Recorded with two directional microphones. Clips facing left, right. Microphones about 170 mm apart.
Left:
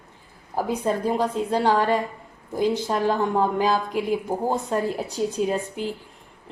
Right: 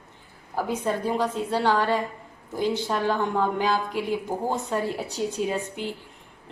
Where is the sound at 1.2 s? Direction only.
40° left (ahead or behind).